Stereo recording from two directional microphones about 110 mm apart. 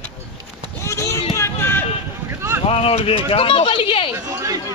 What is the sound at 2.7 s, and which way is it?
Speech, 60° left (ahead or behind).